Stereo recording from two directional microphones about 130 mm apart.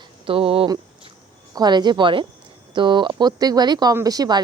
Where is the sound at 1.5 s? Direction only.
35° right (ahead or behind).